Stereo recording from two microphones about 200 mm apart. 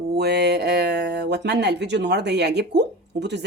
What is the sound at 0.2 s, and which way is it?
Speech, 55° right (ahead or behind).